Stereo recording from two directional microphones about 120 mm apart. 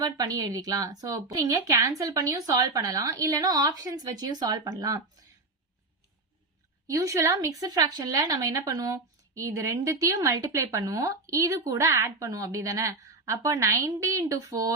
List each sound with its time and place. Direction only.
0.0 s a woman's voice: 30° right (ahead or behind)
6.8 s speech: 25° right (ahead or behind)